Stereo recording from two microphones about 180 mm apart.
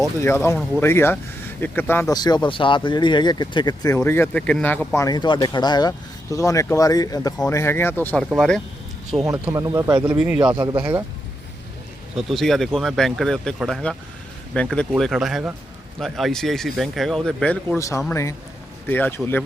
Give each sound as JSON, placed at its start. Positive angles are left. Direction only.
{"t": 0.2, "sound": "speech", "side_deg": 15}
{"t": 5.0, "sound": "speech", "side_deg": 25}
{"t": 9.4, "sound": "speech", "side_deg": -15}
{"t": 10.1, "sound": "speech", "side_deg": -5}
{"t": 10.6, "sound": "speech", "side_deg": -25}
{"t": 12.1, "sound": "speech", "side_deg": 0}
{"t": 17.7, "sound": "speech", "side_deg": 15}